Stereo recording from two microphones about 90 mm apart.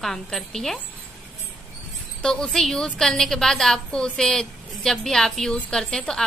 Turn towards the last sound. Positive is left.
turn(degrees=5)  # may be behind; listen again after turning